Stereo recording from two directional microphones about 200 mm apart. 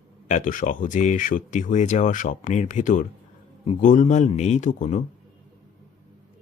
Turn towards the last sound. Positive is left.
turn(degrees=40)  # may be behind; listen again after turning